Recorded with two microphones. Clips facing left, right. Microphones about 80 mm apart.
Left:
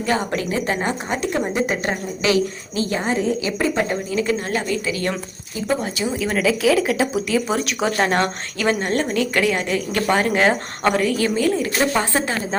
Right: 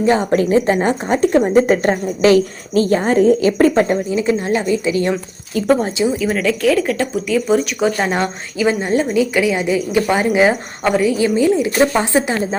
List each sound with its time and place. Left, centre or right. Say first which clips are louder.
0.0 s a woman's voice: right 7 dB; right
3.8 s a woman's voice: right 5 dB; right
5.5 s a woman's voice: right 8 dB; right
6.1 s speech: right 2 dB; centre